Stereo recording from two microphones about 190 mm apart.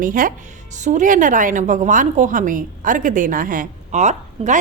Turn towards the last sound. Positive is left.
turn(degrees=-40)  # may be behind; listen again after turning